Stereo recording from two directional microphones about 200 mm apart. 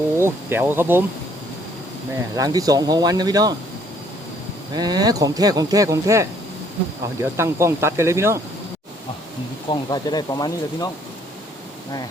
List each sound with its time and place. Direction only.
0.2 s speech: 10° right (ahead or behind)
2.3 s speech: 20° right (ahead or behind)
4.7 s speech: 20° right (ahead or behind)
9.6 s speech: 20° left (ahead or behind)